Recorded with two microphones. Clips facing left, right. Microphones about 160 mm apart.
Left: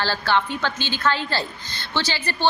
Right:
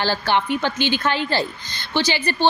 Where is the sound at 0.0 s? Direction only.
15° right (ahead or behind).